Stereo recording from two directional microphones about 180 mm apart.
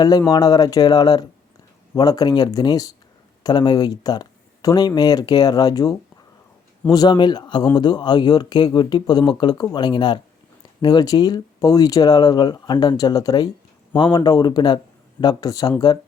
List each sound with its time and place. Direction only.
0.2 s speech: 20° left (ahead or behind)